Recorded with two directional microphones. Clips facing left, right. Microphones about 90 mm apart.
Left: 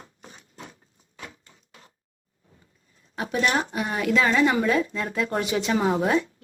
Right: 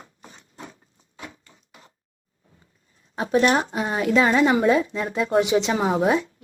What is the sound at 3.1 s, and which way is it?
Speech, 30° right (ahead or behind).